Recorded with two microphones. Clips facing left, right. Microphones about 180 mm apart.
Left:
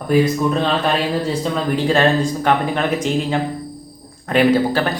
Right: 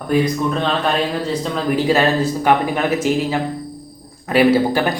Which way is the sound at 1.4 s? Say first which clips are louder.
Even; 5° right (ahead or behind).